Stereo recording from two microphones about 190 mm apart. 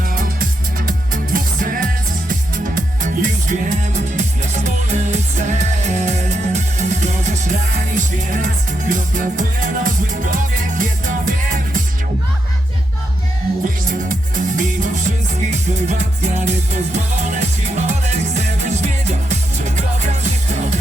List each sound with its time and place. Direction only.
0.0 s music: 50° right (ahead or behind)
14.0 s music: 45° right (ahead or behind)